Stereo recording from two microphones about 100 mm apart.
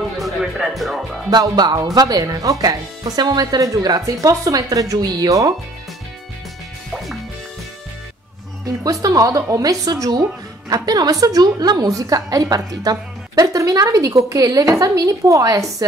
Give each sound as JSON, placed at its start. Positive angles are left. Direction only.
{"t": 0.2, "sound": "music", "side_deg": -5}
{"t": 1.3, "sound": "a woman's voice", "side_deg": -40}
{"t": 8.6, "sound": "a woman's voice", "side_deg": -35}